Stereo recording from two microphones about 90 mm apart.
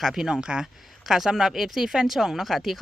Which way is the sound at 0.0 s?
5° right (ahead or behind).